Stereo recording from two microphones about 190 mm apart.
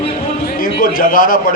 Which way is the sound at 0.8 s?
45° left (ahead or behind).